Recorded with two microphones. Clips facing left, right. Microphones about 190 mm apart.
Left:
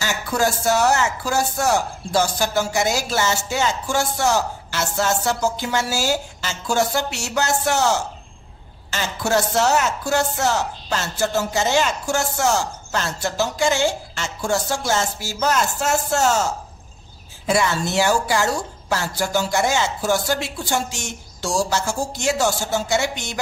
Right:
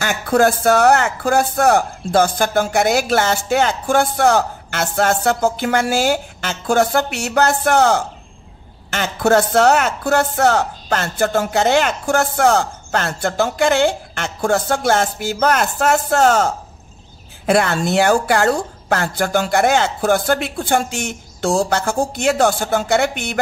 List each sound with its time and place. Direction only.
0.0 s speech: 55° right (ahead or behind)